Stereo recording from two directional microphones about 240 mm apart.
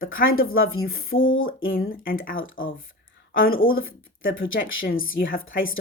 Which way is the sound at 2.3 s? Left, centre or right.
Left.